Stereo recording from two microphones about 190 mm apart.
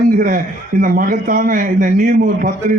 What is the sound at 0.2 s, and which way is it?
A man's voice, 45° right (ahead or behind).